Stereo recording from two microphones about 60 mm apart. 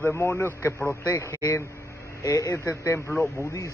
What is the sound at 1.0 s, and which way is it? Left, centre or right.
A man's voice, left.